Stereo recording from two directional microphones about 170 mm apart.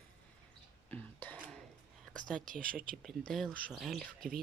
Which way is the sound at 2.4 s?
55° right (ahead or behind).